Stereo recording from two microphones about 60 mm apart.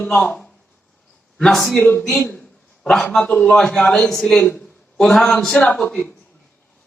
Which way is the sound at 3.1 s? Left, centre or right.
Centre.